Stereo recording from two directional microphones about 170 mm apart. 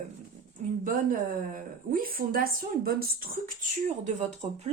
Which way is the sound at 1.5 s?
55° right (ahead or behind).